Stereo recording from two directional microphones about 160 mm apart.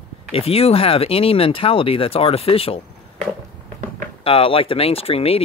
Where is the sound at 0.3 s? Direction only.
35° left (ahead or behind).